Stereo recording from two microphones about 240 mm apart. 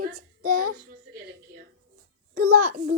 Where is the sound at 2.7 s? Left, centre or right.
Right.